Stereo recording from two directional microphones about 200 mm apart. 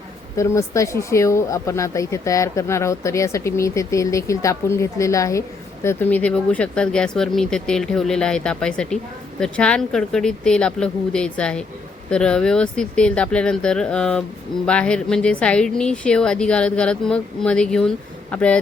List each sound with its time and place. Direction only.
0.3 s a woman's voice: 15° left (ahead or behind)